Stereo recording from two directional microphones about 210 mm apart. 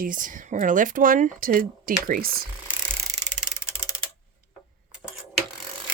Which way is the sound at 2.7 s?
15° right (ahead or behind).